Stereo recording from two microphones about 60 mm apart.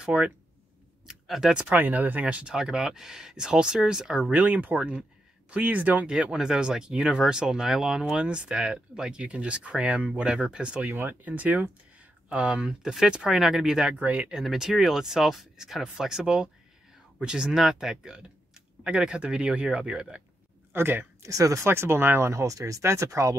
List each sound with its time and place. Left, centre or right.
0.0 s speech: centre
1.0 s a sound: centre
1.7 s speech: right
2.5 s speech: centre; by 6.1 s right
6.3 s speech: centre
13.9 s speech: right
14.3 s speech: centre
20.7 s speech: right
21.3 s speech: right
21.6 s speech: right
22.3 s speech: right